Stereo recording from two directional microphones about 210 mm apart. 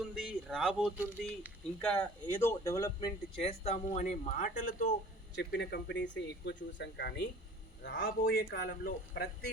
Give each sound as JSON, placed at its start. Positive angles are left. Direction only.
{"t": 0.0, "sound": "speech", "side_deg": 0}
{"t": 3.4, "sound": "speech", "side_deg": 30}
{"t": 5.3, "sound": "speech", "side_deg": 55}